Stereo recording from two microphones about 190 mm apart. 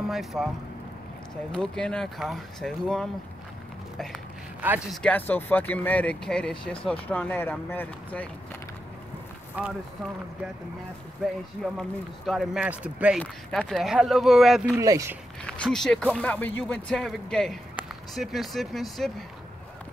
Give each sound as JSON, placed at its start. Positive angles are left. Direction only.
{"t": 0.1, "sound": "speech", "side_deg": 0}
{"t": 1.5, "sound": "speech", "side_deg": 5}
{"t": 4.6, "sound": "speech", "side_deg": -5}
{"t": 5.0, "sound": "speech", "side_deg": 10}
{"t": 9.6, "sound": "speech", "side_deg": -10}
{"t": 11.2, "sound": "speech", "side_deg": 0}
{"t": 13.2, "sound": "speech", "side_deg": 5}
{"t": 14.8, "sound": "speech", "side_deg": -15}
{"t": 15.4, "sound": "speech", "side_deg": 5}